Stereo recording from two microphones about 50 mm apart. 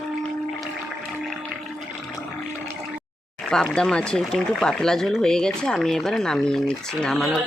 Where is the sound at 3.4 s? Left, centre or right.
Centre.